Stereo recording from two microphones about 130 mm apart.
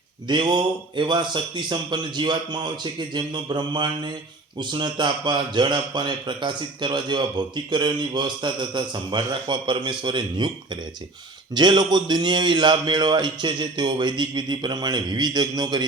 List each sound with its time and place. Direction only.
0.3 s a man's voice: 35° right (ahead or behind)